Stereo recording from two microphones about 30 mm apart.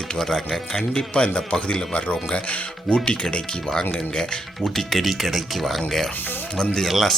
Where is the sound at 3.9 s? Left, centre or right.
Left.